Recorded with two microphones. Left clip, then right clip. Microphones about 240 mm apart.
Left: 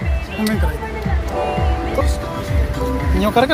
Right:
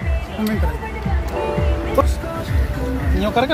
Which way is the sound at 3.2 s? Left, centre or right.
Centre.